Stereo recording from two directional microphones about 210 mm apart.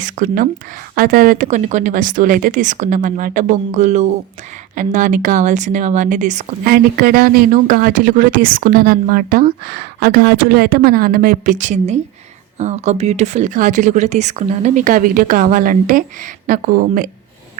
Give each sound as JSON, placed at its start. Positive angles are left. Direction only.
{"t": 0.0, "sound": "speech", "side_deg": -35}